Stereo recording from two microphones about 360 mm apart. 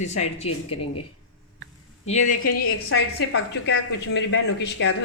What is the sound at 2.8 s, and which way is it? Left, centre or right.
A woman's voice, left.